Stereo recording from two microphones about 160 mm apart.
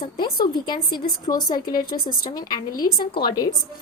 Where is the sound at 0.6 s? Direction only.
25° left (ahead or behind).